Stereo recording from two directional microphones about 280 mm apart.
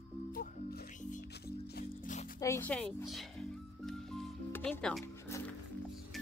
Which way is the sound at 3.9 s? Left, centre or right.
Centre.